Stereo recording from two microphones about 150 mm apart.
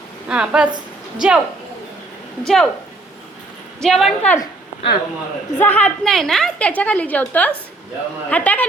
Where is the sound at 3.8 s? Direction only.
Centre (ahead or behind).